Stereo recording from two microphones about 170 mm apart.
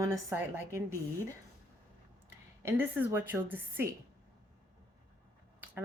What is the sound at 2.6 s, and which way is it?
A woman's voice, 10° right (ahead or behind).